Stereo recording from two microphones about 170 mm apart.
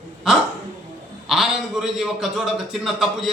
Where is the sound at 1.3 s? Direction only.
5° right (ahead or behind).